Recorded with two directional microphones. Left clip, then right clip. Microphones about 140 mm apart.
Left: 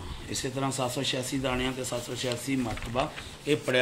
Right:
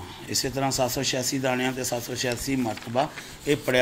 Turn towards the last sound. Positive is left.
turn(degrees=-30)  # may be behind; listen again after turning